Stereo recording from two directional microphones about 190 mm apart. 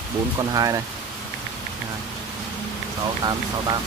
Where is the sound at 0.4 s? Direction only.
20° right (ahead or behind).